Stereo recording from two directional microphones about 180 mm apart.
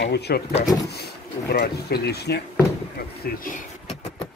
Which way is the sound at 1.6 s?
60° left (ahead or behind).